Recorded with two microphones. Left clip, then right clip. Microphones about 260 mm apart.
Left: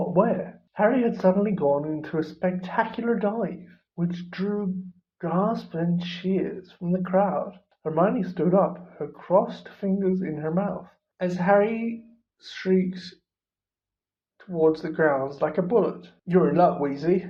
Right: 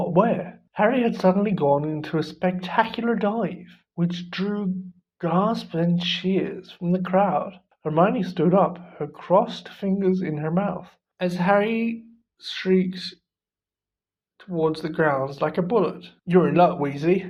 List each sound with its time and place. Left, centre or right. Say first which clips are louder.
0.1 s speech: right 2 dB; right
14.3 s speech: left 2 dB; right